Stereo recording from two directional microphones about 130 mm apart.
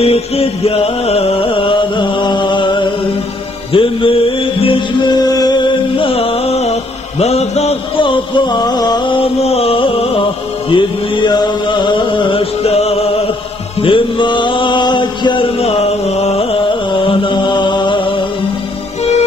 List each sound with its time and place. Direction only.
0.0 s music: 50° left (ahead or behind)
5.2 s music: 30° left (ahead or behind); by 6.7 s 50° left (ahead or behind)
7.2 s a sound: 55° left (ahead or behind)
8.0 s a sound: 35° left (ahead or behind)
10.7 s music: 35° left (ahead or behind); by 13.0 s 50° left (ahead or behind)
13.8 s mantra: 40° left (ahead or behind)
17.1 s mantra: 40° left (ahead or behind)